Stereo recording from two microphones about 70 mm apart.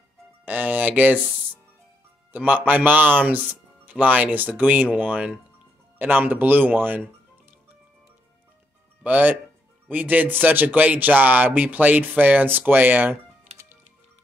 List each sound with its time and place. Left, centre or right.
0.5 s speech: right
2.3 s speech: right
9.0 s speech: right